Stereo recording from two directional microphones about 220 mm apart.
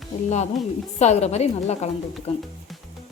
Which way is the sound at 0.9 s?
30° left (ahead or behind).